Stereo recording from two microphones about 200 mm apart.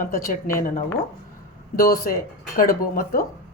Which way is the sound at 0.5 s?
40° left (ahead or behind).